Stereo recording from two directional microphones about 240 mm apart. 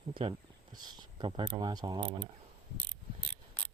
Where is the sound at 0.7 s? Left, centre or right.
Centre.